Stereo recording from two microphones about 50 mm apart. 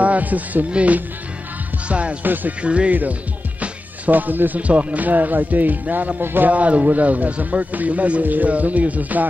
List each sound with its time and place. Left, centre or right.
0.0 s speech: right
2.2 s speech: right
2.6 s speech: right
2.9 s speech: right
6.5 s speech: right